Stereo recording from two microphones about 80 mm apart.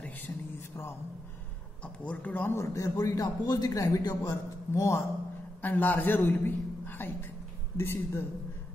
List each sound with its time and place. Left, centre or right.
2.0 s a woman's voice: left
2.5 s a man's voice: left
5.6 s a man's voice: left